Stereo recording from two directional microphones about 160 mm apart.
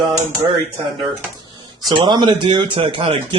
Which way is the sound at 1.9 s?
25° right (ahead or behind).